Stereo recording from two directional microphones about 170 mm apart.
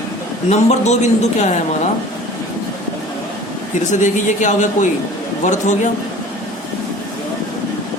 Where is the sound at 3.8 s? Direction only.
45° left (ahead or behind).